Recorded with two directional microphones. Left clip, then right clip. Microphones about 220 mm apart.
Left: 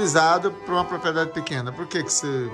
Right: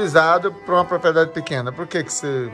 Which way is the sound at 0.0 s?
10° left (ahead or behind).